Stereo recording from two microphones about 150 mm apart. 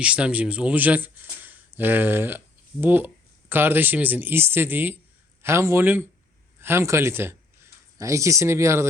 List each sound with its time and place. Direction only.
0.0 s speech: 10° right (ahead or behind)